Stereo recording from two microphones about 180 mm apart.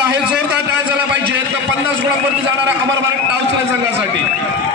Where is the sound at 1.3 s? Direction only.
80° right.